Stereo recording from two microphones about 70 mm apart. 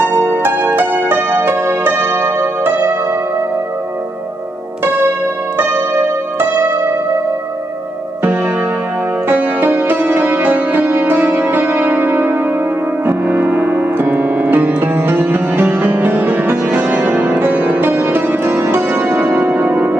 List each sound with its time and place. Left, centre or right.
0.0 s music: right
5.6 s music: right
9.3 s music: right